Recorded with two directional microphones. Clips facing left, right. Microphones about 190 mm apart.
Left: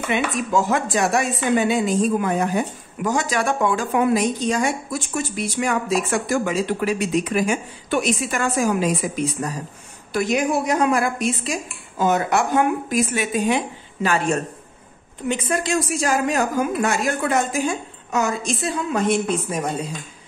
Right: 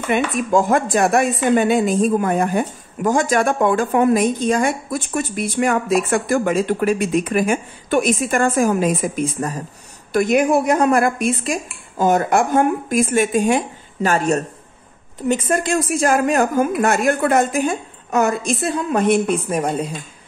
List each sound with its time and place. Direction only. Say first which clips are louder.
0.1 s a woman's voice: right 4 dB; 50° right (ahead or behind)